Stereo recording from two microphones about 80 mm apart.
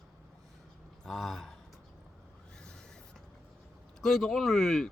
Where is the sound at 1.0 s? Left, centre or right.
Centre.